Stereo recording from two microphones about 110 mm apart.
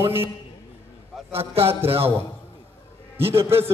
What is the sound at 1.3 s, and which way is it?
Speech, 60° right (ahead or behind).